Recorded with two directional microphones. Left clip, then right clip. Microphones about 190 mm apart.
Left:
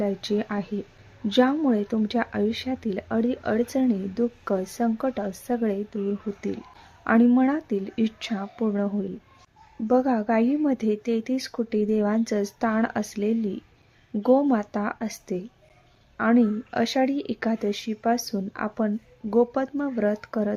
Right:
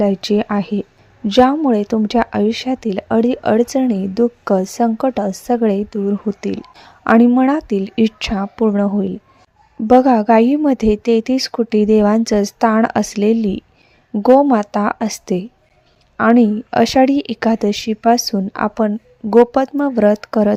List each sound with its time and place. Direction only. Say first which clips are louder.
0.0 s speech: right 10 dB; 40° right (ahead or behind)